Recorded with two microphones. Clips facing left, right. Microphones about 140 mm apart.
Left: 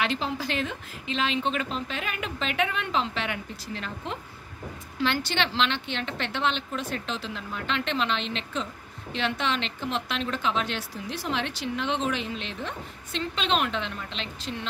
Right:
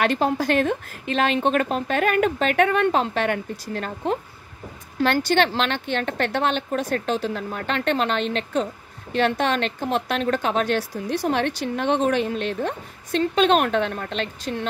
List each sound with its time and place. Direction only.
0.0 s speech: 50° right (ahead or behind)